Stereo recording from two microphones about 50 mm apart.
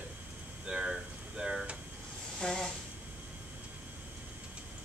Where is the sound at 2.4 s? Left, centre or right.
Centre.